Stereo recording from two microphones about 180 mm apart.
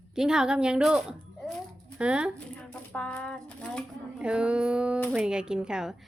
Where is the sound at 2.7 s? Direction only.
10° left (ahead or behind).